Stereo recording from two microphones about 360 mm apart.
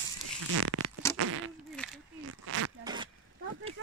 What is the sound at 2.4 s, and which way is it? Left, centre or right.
Zipper, right.